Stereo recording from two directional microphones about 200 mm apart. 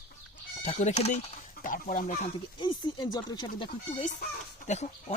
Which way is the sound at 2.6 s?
20° left (ahead or behind).